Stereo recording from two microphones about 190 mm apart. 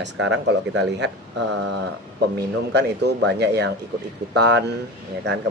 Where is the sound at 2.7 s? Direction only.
60° right (ahead or behind).